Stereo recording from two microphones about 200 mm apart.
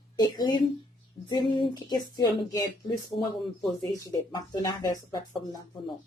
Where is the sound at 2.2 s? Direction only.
20° left (ahead or behind).